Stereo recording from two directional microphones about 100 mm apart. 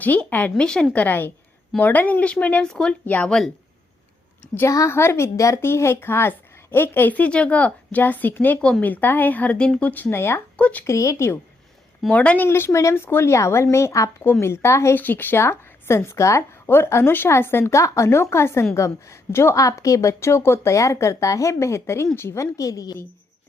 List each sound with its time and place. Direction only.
0.0 s a woman's voice: 15° left (ahead or behind)
4.5 s a woman's voice: 30° left (ahead or behind); by 10.8 s 15° left (ahead or behind)
10.8 s a woman's voice: 30° left (ahead or behind)
12.0 s speech: 10° left (ahead or behind)
12.5 s a woman's voice: 25° left (ahead or behind)